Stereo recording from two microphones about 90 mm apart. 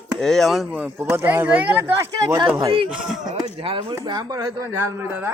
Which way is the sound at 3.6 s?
65° right (ahead or behind).